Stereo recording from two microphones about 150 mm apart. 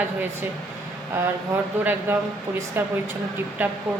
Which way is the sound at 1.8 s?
15° right (ahead or behind).